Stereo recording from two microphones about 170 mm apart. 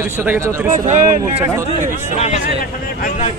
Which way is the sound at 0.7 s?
45° right (ahead or behind).